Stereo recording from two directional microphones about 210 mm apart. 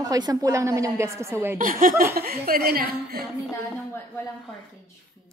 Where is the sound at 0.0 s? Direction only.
20° right (ahead or behind).